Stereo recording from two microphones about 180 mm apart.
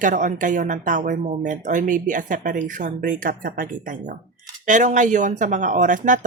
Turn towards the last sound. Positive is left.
turn(degrees=-45)  # may be behind; listen again after turning